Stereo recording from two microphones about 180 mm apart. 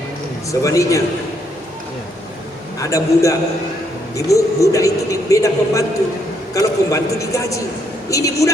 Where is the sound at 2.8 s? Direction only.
20° left (ahead or behind).